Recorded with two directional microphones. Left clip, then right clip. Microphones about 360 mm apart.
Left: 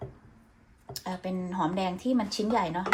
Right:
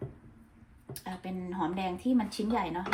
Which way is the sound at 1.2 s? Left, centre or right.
Left.